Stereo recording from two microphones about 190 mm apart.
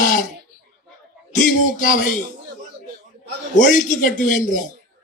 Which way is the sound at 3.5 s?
45° left (ahead or behind).